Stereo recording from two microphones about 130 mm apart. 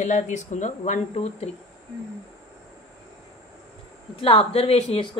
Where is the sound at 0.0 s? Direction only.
65° left (ahead or behind).